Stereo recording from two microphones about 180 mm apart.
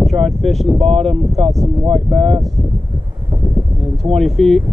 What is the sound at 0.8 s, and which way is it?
Speech, 35° right (ahead or behind).